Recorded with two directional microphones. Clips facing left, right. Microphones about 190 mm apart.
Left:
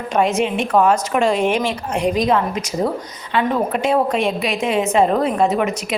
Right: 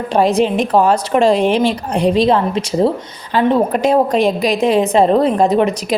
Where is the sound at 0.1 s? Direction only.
35° right (ahead or behind).